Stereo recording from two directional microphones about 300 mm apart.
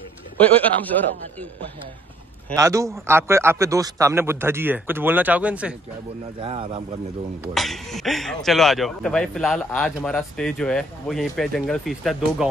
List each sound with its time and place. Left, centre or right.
0.4 s speech: centre
2.5 s a man's voice: centre
6.4 s speech: centre
7.4 s speech: centre